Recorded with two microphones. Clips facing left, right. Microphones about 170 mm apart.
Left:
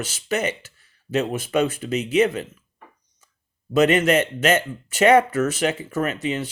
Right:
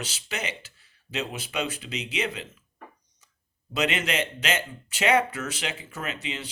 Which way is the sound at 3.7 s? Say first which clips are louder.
Left 10 dB; 45° left (ahead or behind).